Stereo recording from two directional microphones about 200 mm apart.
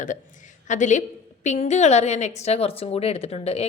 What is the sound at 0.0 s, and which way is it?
A woman's voice, 40° left (ahead or behind).